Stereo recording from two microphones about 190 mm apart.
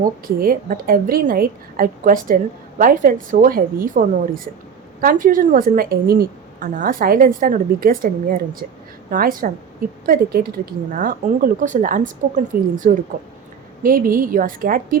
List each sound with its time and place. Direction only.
0.0 s a woman's voice: 50° right (ahead or behind)